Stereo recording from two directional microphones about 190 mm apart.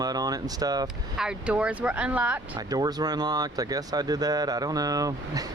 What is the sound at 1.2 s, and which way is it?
Speech, 5° right (ahead or behind).